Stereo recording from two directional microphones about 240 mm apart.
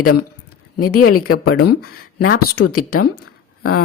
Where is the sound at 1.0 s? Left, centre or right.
Left.